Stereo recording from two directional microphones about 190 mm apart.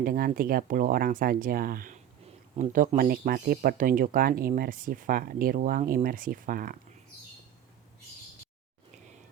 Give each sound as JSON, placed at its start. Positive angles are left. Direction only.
{"t": 0.0, "sound": "speech", "side_deg": -50}